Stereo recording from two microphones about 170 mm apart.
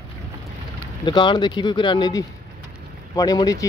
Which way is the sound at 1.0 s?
30° left (ahead or behind).